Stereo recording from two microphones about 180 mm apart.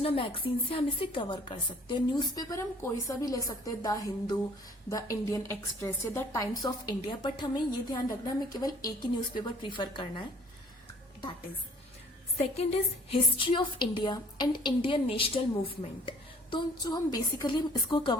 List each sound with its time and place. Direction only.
0.0 s a woman's voice: 30° left (ahead or behind)
13.1 s a woman's voice: 30° left (ahead or behind)